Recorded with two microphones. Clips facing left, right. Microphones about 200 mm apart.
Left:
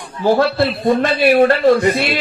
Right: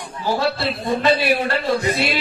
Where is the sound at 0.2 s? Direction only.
55° left (ahead or behind).